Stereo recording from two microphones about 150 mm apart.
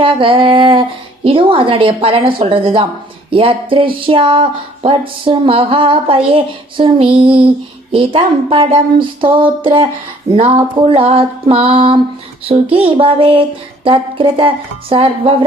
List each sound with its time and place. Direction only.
0.0 s speech: 35° right (ahead or behind)
10.3 s speech: 45° right (ahead or behind)